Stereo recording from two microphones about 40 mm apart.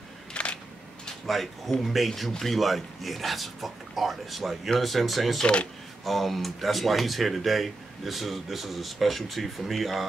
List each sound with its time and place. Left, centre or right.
0.3 s camera: left
1.2 s speech: centre
5.4 s speech: left
6.0 s speech: centre